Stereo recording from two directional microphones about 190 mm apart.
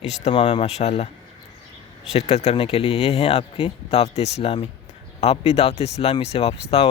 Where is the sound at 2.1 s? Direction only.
35° left (ahead or behind).